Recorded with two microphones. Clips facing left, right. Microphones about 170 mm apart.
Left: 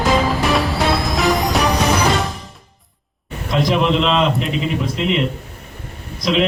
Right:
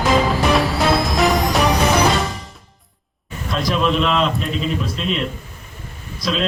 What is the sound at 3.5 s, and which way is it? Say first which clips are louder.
A man's voice: left 3 dB; 20° left (ahead or behind).